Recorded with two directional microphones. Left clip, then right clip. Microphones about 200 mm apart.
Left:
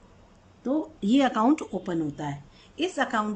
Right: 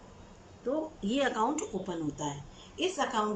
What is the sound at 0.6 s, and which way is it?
A woman's voice, 55° left (ahead or behind).